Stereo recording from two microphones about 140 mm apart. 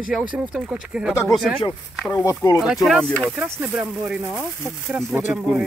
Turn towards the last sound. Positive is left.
turn(degrees=0)  # may be behind; listen again after turning